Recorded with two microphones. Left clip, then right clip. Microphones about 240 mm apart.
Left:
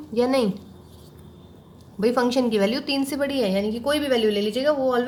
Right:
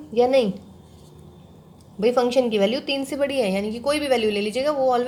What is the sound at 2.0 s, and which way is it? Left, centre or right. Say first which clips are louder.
A woman's voice: right 2 dB; centre.